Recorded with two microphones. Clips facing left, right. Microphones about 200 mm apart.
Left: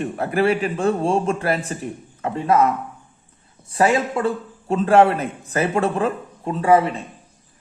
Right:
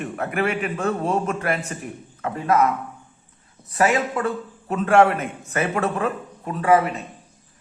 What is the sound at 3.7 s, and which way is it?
A man's voice, 30° left (ahead or behind).